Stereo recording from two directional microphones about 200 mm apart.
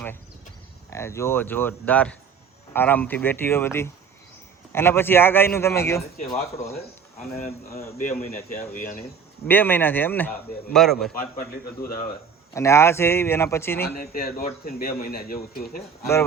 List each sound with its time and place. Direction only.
0.9 s speech: 15° left (ahead or behind)
7.3 s speech: 30° left (ahead or behind)
9.5 s speech: 10° left (ahead or behind)
11.1 s speech: 45° left (ahead or behind)
12.5 s speech: 15° left (ahead or behind)
14.0 s speech: 45° left (ahead or behind)